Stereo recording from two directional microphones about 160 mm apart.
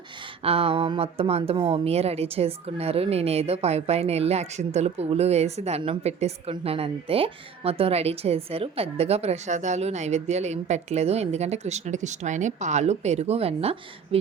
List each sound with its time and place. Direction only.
0.4 s a woman's voice: 35° right (ahead or behind)